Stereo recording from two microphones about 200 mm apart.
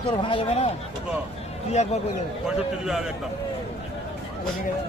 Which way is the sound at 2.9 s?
Centre (ahead or behind).